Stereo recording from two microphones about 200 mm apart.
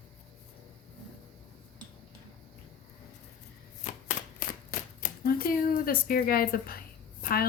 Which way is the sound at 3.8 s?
40° left (ahead or behind).